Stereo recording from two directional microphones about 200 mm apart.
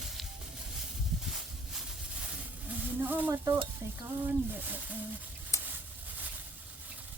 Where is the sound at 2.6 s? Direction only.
10° right (ahead or behind).